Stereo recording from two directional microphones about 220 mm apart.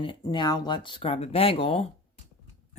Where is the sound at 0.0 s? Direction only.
20° left (ahead or behind).